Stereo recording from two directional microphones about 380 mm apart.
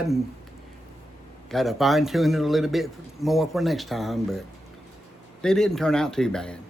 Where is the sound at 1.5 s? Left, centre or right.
Centre.